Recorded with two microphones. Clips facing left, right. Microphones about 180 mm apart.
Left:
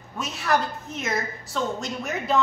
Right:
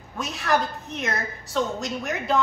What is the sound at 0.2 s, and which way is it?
A woman's voice, centre (ahead or behind).